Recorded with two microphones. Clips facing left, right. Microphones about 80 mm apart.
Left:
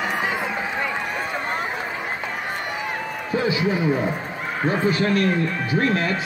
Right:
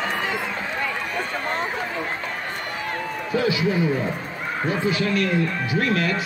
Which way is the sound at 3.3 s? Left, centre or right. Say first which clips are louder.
Even; left.